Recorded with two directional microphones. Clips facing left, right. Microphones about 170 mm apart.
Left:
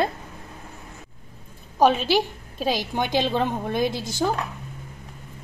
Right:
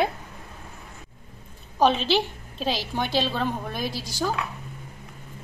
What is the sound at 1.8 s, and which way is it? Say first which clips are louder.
A woman's voice: left 2 dB; 10° left (ahead or behind).